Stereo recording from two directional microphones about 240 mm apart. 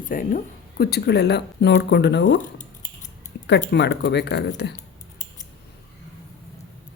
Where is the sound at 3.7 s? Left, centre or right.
Left.